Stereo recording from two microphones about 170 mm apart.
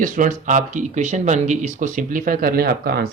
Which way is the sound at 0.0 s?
50° right (ahead or behind).